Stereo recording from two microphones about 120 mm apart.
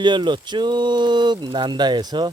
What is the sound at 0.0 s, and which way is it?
Speech, 40° right (ahead or behind).